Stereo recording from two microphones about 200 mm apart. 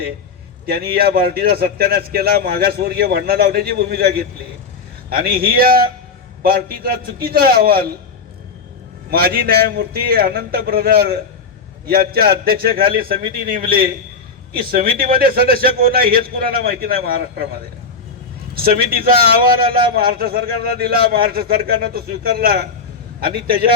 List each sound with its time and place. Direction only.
0.6 s a man's voice: 50° right (ahead or behind)
9.0 s a man's voice: 50° right (ahead or behind)
18.5 s a man's voice: 50° right (ahead or behind)